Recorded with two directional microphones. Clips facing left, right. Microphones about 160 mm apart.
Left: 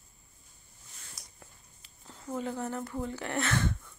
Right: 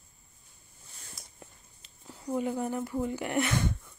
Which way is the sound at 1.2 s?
25° right (ahead or behind).